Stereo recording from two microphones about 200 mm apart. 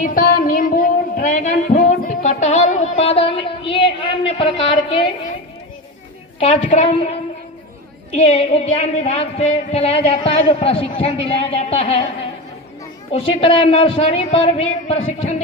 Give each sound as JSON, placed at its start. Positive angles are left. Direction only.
{"t": 0.0, "sound": "music", "side_deg": 45}
{"t": 6.4, "sound": "speech", "side_deg": 35}
{"t": 13.1, "sound": "a woman's voice", "side_deg": 30}